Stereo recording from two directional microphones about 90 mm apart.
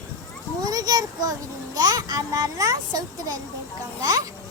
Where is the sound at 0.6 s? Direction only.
45° right (ahead or behind).